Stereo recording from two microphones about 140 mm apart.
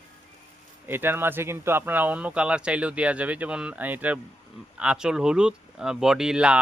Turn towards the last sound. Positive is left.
turn(degrees=-5)  # may be behind; listen again after turning